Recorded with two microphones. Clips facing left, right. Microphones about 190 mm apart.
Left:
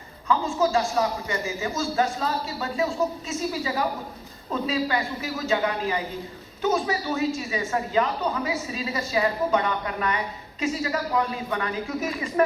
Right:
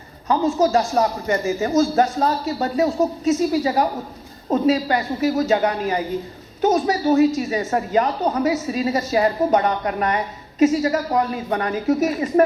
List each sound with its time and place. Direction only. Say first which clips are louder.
0.3 s a man's voice: right 5 dB; 40° right (ahead or behind)